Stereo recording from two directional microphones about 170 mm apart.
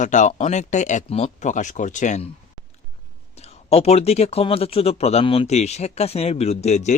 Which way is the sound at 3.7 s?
40° left (ahead or behind).